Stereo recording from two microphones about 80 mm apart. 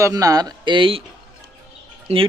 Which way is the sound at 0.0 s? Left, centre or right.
Right.